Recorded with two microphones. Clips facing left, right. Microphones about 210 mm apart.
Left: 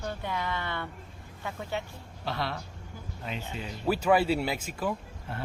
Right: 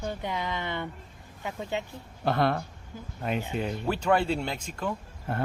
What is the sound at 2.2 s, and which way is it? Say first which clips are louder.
Speech: right 8 dB; 50° right (ahead or behind).